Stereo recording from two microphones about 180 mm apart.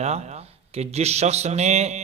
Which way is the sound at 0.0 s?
35° right (ahead or behind).